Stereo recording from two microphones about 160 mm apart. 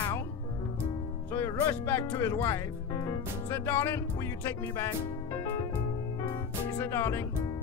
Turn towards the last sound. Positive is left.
turn(degrees=15)  # may be behind; listen again after turning